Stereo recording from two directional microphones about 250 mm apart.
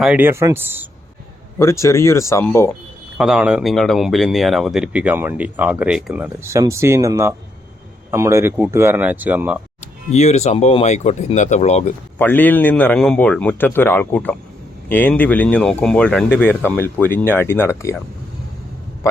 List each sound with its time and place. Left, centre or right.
0.0 s speech: centre
1.5 s a man's voice: centre
3.2 s speech: centre
10.1 s speech: left
12.2 s a man's voice: centre